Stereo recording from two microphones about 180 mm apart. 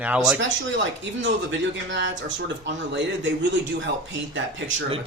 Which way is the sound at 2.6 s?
80° right.